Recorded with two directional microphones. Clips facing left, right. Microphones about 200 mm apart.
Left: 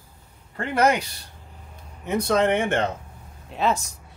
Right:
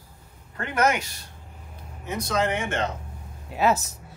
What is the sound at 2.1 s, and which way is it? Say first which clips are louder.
Speech: left 5 dB; 60° left (ahead or behind).